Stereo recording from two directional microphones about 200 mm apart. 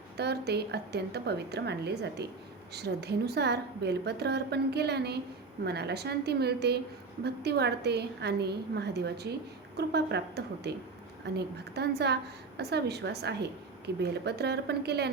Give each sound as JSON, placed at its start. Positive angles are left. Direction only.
{"t": 0.2, "sound": "a woman's voice", "side_deg": -55}